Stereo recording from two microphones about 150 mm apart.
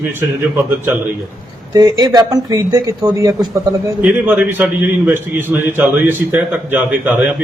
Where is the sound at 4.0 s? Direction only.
10° right (ahead or behind).